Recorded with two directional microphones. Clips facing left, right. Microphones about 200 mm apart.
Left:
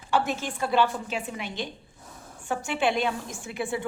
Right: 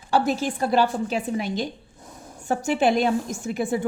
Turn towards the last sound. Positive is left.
turn(degrees=-40)  # may be behind; listen again after turning